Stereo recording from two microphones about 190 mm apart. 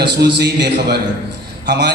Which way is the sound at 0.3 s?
60° right (ahead or behind).